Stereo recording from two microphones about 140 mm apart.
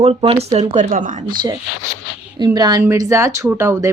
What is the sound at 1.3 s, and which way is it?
Speech, 30° right (ahead or behind).